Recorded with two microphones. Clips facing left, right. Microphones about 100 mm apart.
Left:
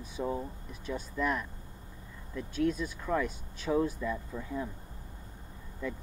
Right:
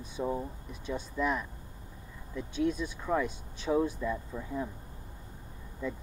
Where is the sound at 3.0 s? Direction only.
10° right (ahead or behind).